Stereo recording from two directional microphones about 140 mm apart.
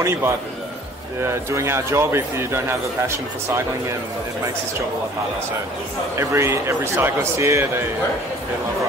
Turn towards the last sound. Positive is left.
turn(degrees=-20)  # may be behind; listen again after turning